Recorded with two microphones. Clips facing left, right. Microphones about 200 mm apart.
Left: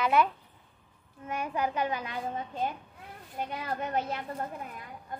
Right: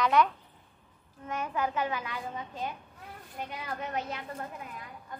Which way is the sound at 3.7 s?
50° left (ahead or behind).